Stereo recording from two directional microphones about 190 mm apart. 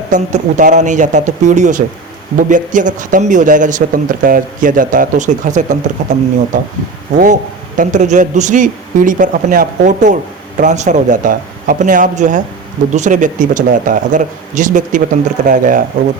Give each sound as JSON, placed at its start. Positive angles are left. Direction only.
{"t": 0.1, "sound": "a man's voice", "side_deg": -40}
{"t": 7.8, "sound": "a man's voice", "side_deg": -40}